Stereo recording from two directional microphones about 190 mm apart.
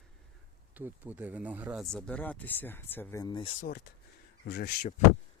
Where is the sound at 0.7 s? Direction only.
10° right (ahead or behind); by 3.5 s 25° left (ahead or behind).